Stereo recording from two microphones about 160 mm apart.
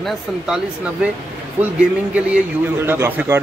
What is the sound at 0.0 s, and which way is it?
Speech, centre (ahead or behind).